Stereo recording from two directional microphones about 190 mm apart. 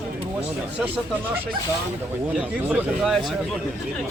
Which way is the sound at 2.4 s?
10° right (ahead or behind).